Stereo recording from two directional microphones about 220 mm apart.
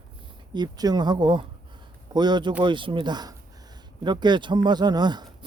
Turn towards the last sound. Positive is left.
turn(degrees=-20)  # may be behind; listen again after turning